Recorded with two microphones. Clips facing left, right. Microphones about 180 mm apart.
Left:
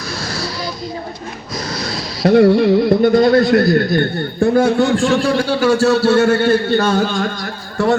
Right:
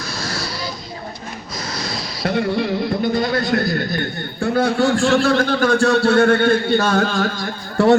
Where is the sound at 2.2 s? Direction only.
40° left (ahead or behind).